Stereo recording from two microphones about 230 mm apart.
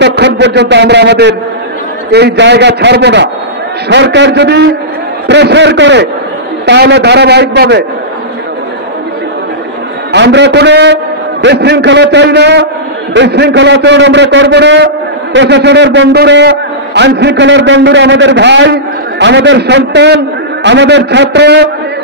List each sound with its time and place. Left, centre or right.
0.0 s a man's voice: right
10.1 s a man's voice: right